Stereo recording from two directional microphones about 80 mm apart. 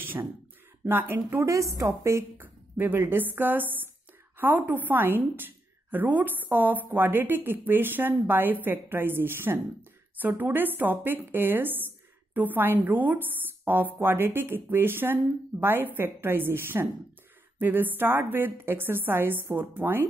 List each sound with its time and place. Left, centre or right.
0.0 s a sound: right
0.8 s a woman's voice: right
1.5 s a woman's voice: right
2.4 s a woman's voice: right